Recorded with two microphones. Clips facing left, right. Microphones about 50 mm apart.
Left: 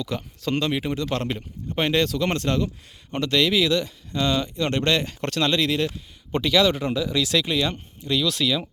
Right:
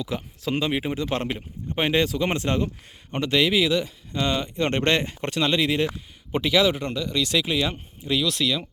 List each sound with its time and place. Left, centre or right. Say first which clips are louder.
0.0 s speech: left 1 dB; centre; by 5.1 s right
5.2 s speech: even; centre
6.8 s speech: left 2 dB; centre